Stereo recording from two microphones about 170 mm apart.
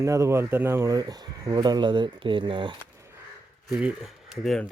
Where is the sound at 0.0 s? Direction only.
20° right (ahead or behind).